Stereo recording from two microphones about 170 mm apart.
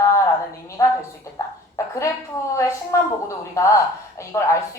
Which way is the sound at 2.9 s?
20° left (ahead or behind).